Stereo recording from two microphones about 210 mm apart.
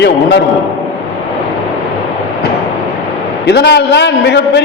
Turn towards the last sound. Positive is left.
turn(degrees=55)  # may be behind; listen again after turning